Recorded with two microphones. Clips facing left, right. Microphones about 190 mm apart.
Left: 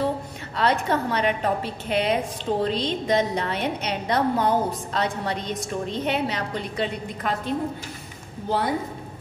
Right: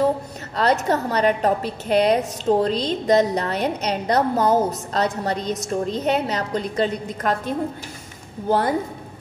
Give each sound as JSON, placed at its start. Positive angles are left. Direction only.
{"t": 0.6, "sound": "a woman's voice", "side_deg": -40}